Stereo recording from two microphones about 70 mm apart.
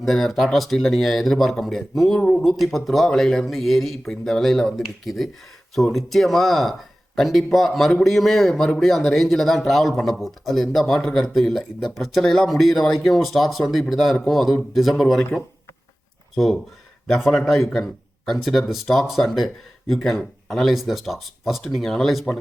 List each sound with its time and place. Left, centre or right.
0.0 s speech: centre